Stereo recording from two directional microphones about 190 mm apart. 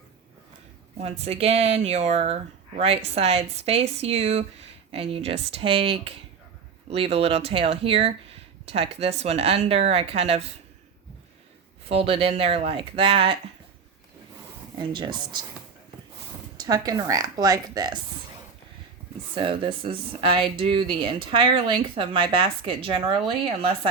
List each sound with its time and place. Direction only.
0.9 s speech: 35° right (ahead or behind)
11.9 s speech: 30° right (ahead or behind)
14.9 s speech: 25° right (ahead or behind)
16.6 s speech: 20° right (ahead or behind)
19.3 s speech: 25° right (ahead or behind)